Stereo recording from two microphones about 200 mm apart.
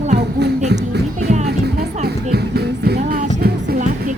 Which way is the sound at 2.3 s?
55° right (ahead or behind).